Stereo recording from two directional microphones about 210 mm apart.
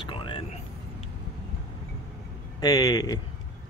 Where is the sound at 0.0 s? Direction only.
25° left (ahead or behind).